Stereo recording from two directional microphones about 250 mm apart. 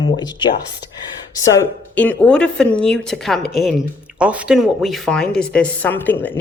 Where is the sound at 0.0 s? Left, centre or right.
Centre.